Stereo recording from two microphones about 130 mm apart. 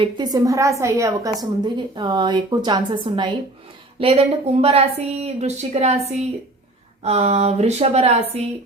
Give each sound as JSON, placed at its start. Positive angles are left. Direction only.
{"t": 0.0, "sound": "a woman's voice", "side_deg": -30}
{"t": 1.6, "sound": "a woman's voice", "side_deg": -35}
{"t": 4.0, "sound": "a woman's voice", "side_deg": -50}